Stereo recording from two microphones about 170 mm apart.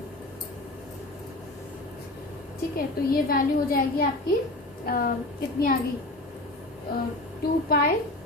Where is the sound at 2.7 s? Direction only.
55° left (ahead or behind).